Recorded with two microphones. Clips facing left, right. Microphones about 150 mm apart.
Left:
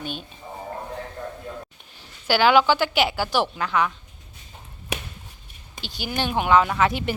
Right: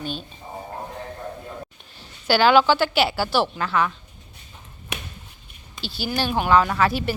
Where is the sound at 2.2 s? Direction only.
15° left (ahead or behind).